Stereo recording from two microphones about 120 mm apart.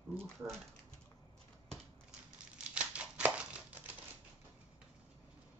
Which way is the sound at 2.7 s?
10° right (ahead or behind).